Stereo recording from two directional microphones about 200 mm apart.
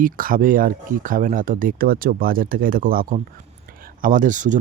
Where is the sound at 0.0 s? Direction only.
45° right (ahead or behind).